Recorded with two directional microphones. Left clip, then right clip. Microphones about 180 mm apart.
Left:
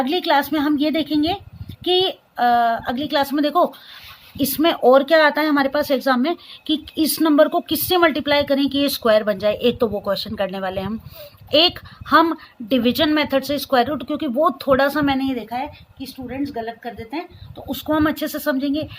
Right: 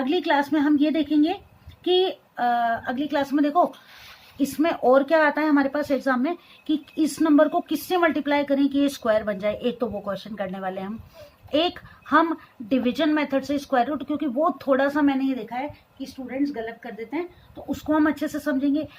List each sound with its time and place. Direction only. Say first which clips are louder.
0.1 s a woman's voice: left 1 dB; 45° left (ahead or behind)
17.7 s a woman's voice: left 3 dB; 45° left (ahead or behind)